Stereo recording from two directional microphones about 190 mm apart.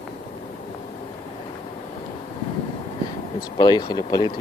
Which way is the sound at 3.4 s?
20° left (ahead or behind).